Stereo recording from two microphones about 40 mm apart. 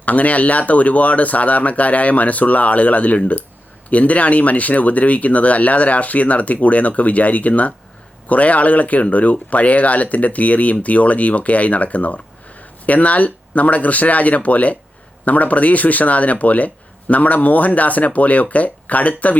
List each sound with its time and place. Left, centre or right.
0.0 s speech: left